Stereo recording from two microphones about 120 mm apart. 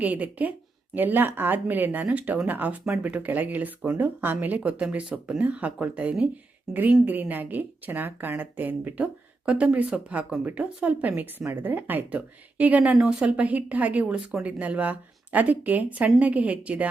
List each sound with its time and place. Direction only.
0.0 s a woman's voice: 15° right (ahead or behind)